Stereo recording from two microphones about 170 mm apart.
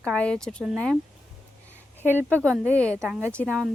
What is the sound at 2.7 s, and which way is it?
Speech, 10° left (ahead or behind).